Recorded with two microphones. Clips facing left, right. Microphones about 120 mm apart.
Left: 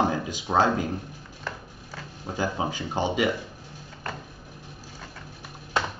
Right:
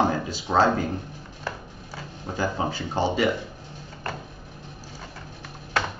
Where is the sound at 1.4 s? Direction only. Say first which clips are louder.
Right 2 dB; centre (ahead or behind).